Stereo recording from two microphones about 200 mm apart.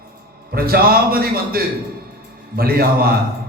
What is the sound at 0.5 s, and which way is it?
A man's voice, 50° right (ahead or behind).